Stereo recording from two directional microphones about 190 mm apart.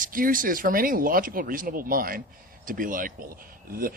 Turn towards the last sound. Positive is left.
turn(degrees=-50)  # may be behind; listen again after turning